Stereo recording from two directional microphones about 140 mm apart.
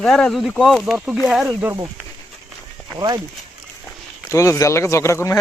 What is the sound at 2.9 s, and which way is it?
Speech, 30° right (ahead or behind).